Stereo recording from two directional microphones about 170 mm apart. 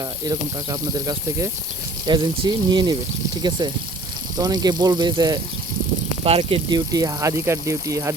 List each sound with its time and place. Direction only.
0.3 s speech: 20° right (ahead or behind)
6.2 s speech: 35° right (ahead or behind); by 8.1 s 20° right (ahead or behind)